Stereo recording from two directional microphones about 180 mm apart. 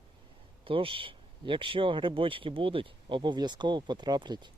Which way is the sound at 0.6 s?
30° right (ahead or behind).